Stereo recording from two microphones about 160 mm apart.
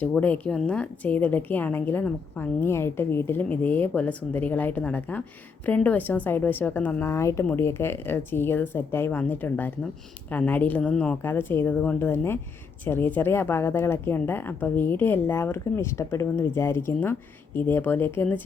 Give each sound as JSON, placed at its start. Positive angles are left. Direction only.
{"t": 0.0, "sound": "speech", "side_deg": 10}